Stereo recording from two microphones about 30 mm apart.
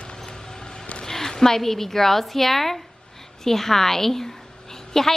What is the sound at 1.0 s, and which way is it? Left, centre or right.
A woman's voice, centre.